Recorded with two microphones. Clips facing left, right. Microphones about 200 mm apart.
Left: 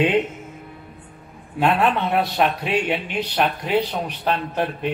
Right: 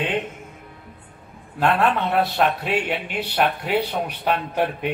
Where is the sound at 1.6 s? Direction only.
Centre (ahead or behind).